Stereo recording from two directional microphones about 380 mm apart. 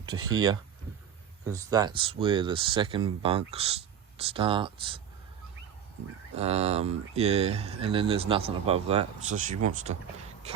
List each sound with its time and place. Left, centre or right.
0.3 s speech: centre
6.3 s speech: centre